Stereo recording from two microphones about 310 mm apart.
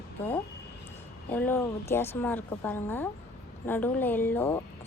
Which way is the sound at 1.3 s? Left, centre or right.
Centre.